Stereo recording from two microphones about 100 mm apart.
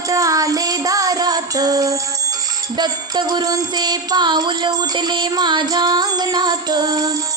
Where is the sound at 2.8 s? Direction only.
45° right (ahead or behind).